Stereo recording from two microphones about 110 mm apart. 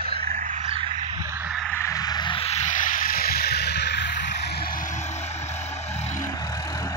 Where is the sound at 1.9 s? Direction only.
35° left (ahead or behind).